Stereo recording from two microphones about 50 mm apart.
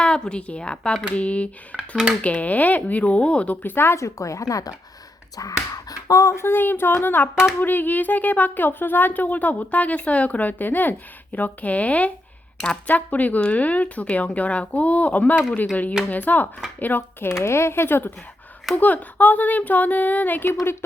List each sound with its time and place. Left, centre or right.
0.0 s speech: centre
1.7 s speech: right
2.2 s speech: left
3.6 s speech: left
3.9 s speech: left
6.1 s speech: left
17.3 s speech: left
18.8 s speech: left